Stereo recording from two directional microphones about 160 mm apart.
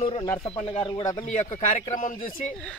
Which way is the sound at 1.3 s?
50° left (ahead or behind).